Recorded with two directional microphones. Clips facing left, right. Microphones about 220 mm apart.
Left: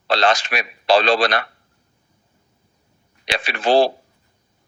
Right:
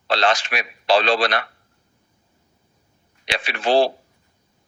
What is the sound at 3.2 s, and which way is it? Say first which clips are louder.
Speech: left 2 dB; 40° left (ahead or behind).